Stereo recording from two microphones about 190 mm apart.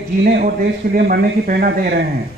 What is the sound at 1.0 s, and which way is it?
A man's voice, 50° right (ahead or behind).